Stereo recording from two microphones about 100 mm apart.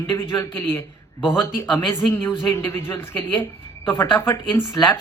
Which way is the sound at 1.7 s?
25° left (ahead or behind).